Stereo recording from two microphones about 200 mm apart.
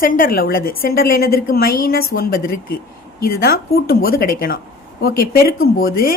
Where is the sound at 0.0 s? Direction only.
45° left (ahead or behind).